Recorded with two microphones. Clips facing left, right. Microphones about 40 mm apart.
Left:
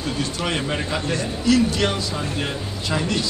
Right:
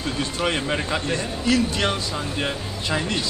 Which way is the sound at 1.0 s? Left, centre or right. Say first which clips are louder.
Left 2 dB; right.